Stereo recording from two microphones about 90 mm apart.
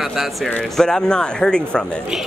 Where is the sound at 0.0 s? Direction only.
5° right (ahead or behind).